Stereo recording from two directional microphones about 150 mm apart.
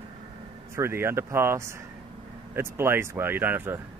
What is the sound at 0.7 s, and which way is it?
Speech, 15° right (ahead or behind).